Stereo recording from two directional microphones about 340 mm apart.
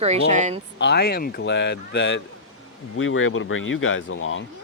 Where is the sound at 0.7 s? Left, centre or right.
Left.